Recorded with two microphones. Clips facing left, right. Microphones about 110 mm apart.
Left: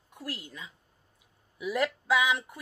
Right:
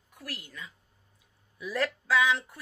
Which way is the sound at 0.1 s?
20° left (ahead or behind).